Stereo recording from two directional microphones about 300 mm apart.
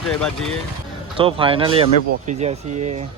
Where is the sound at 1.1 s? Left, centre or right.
Centre.